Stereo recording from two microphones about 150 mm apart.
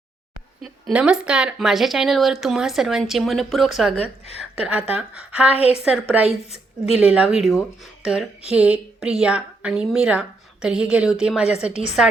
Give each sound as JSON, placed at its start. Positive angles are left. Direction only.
{"t": 0.6, "sound": "speech", "side_deg": -5}
{"t": 3.9, "sound": "a woman's voice", "side_deg": 40}
{"t": 4.5, "sound": "a woman's voice", "side_deg": -10}
{"t": 5.5, "sound": "speech", "side_deg": 40}
{"t": 5.8, "sound": "a woman's voice", "side_deg": -5}
{"t": 6.5, "sound": "a woman's voice", "side_deg": 45}
{"t": 7.0, "sound": "speech", "side_deg": -10}
{"t": 8.0, "sound": "a sound", "side_deg": -5}
{"t": 8.4, "sound": "speech", "side_deg": -10}
{"t": 11.7, "sound": "speech", "side_deg": 50}